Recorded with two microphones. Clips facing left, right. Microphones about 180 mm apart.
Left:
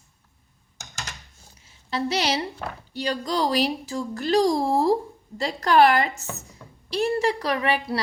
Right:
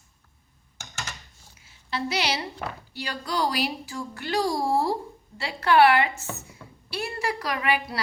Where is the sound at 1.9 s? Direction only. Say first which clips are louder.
Left 3 dB; 40° left (ahead or behind).